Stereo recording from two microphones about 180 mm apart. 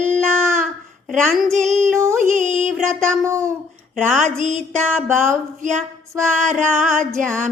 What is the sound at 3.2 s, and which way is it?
Humming, 15° right (ahead or behind).